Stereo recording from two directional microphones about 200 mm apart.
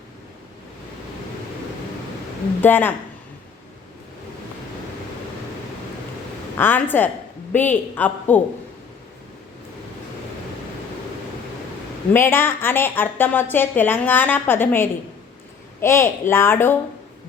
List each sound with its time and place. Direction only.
2.6 s a woman's voice: 10° left (ahead or behind)
6.6 s a woman's voice: 10° left (ahead or behind)
12.1 s a woman's voice: 10° left (ahead or behind)